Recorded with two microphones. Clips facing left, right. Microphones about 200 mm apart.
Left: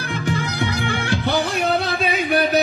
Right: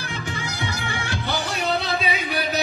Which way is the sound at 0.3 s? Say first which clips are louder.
Left 8 dB; 60° left (ahead or behind).